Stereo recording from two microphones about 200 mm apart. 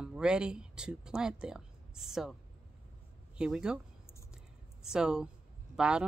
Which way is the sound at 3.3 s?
5° right (ahead or behind).